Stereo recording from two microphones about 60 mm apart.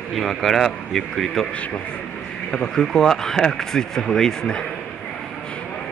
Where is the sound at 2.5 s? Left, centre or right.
Centre.